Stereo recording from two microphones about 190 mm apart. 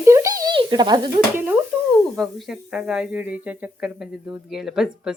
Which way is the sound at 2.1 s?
Centre (ahead or behind).